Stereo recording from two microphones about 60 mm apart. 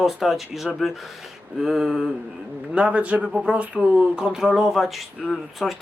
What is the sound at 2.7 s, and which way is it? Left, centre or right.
A man's voice, right.